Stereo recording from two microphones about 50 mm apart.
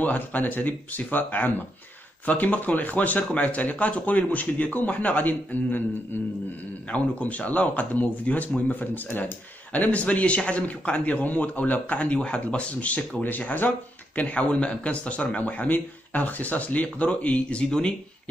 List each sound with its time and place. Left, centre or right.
0.0 s speech: left
6.9 s speech: left